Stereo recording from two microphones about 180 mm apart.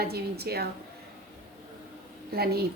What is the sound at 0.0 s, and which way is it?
Speech, 60° right (ahead or behind).